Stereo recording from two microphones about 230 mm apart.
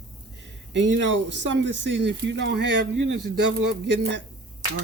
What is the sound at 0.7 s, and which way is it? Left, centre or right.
Speech, right.